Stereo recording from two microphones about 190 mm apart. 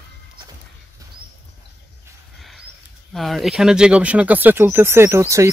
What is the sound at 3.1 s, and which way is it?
Speech, centre (ahead or behind).